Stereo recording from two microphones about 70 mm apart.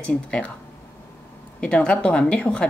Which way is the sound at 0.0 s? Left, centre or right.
Centre.